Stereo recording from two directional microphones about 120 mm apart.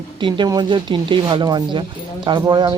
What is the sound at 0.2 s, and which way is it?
Speech, 45° right (ahead or behind).